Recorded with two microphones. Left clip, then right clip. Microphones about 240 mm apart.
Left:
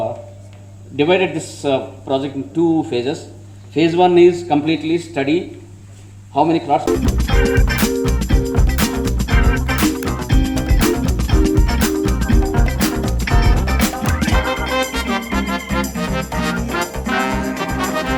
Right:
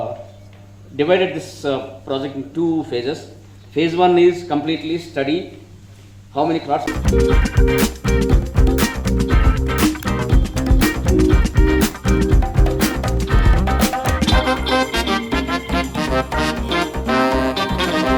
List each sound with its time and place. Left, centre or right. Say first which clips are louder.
0.9 s a man's voice: left 1 dB; left
2.9 s a man's voice: left 2 dB; left
6.8 s music: right 1 dB; centre